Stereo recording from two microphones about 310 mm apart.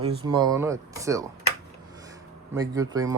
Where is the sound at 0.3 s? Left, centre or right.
Centre.